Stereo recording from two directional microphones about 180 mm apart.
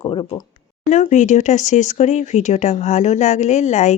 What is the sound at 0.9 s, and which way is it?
Speech, 40° left (ahead or behind).